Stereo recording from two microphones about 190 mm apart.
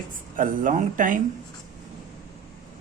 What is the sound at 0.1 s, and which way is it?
Speech, 45° right (ahead or behind).